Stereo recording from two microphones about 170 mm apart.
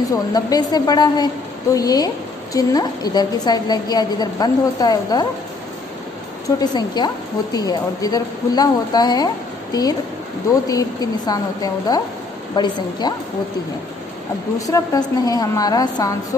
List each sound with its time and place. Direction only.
0.1 s a woman's voice: 20° left (ahead or behind)
6.6 s a woman's voice: 25° left (ahead or behind)
14.7 s a woman's voice: 20° left (ahead or behind)